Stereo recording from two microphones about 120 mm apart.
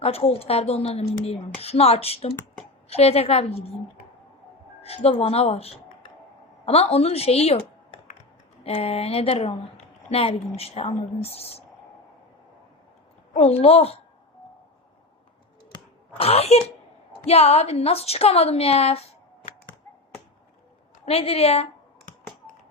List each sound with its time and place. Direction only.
0.0 s a woman's voice: 55° left (ahead or behind)
4.8 s a woman's voice: 55° left (ahead or behind)
6.9 s a woman's voice: 60° left (ahead or behind)
8.6 s a woman's voice: 60° left (ahead or behind)
13.3 s a woman's voice: 60° left (ahead or behind)
16.1 s a woman's voice: 55° left (ahead or behind)
21.0 s a woman's voice: 55° left (ahead or behind)